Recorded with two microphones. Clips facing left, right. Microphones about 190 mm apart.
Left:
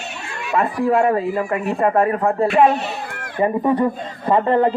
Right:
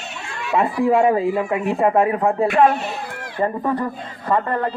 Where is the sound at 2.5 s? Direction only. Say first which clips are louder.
Left 1 dB; 20° left (ahead or behind).